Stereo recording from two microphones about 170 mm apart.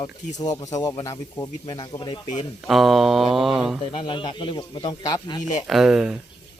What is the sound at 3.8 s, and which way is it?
Speech, 30° left (ahead or behind).